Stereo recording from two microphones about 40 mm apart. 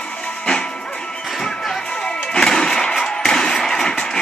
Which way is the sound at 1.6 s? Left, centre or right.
Centre.